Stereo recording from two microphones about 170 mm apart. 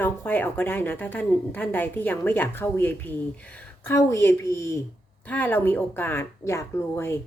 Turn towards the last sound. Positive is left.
turn(degrees=15)  # may be behind; listen again after turning